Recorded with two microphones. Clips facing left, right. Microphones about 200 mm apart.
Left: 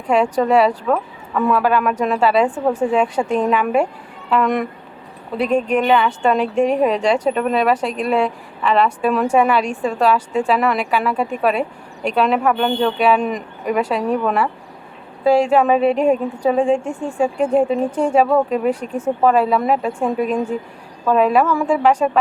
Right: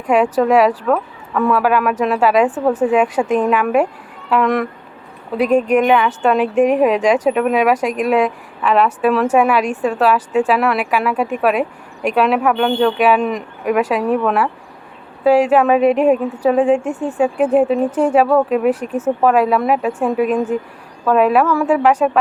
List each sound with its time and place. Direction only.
0.1 s speech: 5° right (ahead or behind)
2.5 s a woman's voice: 10° left (ahead or behind)
2.8 s speech: 5° right (ahead or behind)